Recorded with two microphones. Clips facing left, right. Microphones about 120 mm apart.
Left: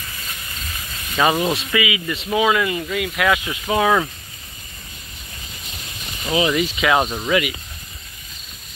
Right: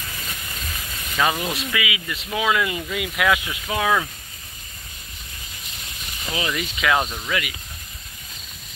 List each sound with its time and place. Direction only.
1.1 s speech: 20° left (ahead or behind)
1.6 s speech: centre (ahead or behind)
3.4 s speech: 10° left (ahead or behind)
6.2 s speech: 15° left (ahead or behind)
7.0 s speech: 25° left (ahead or behind)